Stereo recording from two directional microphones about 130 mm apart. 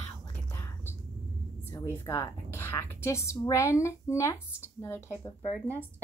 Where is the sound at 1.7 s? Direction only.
20° left (ahead or behind).